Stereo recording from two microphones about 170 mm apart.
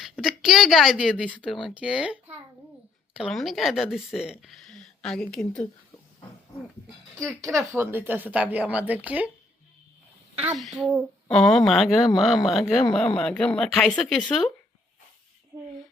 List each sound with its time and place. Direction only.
0.0 s speech: centre (ahead or behind)
7.2 s speech: 5° left (ahead or behind)
7.5 s a woman's voice: 15° right (ahead or behind)
10.3 s speech: 5° right (ahead or behind)